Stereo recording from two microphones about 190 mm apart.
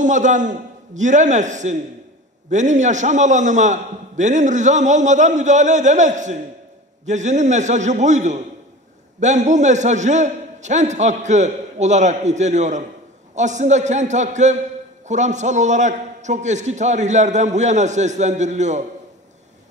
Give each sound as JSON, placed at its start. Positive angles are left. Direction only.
{"t": 0.0, "sound": "a man's voice", "side_deg": -40}